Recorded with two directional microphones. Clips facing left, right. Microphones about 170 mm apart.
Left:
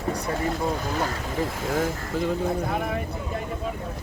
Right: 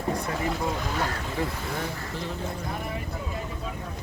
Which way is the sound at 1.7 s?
45° left (ahead or behind).